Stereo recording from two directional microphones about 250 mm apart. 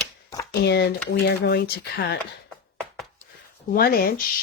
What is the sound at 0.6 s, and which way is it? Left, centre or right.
Speech, left.